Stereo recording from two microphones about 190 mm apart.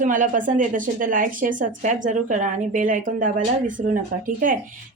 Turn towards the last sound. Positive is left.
turn(degrees=-45)  # may be behind; listen again after turning